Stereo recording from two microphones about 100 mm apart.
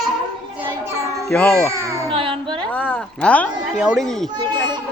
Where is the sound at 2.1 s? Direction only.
60° right (ahead or behind).